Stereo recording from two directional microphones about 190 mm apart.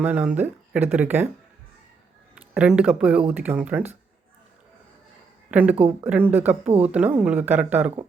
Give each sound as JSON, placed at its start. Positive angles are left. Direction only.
{"t": 0.0, "sound": "speech", "side_deg": -5}
{"t": 2.3, "sound": "speech", "side_deg": -5}
{"t": 5.5, "sound": "speech", "side_deg": -5}